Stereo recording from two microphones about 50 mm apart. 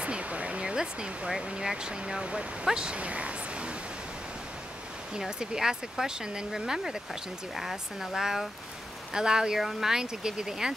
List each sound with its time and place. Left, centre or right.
0.0 s speech: right
5.1 s speech: centre